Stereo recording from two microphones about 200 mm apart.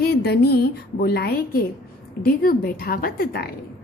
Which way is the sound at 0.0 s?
55° left (ahead or behind).